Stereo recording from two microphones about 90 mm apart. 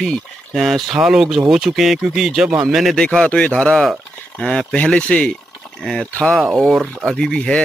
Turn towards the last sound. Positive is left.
turn(degrees=10)  # may be behind; listen again after turning